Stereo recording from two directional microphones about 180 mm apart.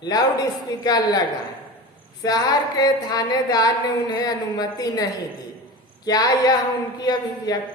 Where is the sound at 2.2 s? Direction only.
20° left (ahead or behind).